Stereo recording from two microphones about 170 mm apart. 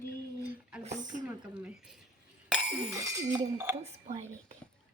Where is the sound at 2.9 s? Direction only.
20° right (ahead or behind).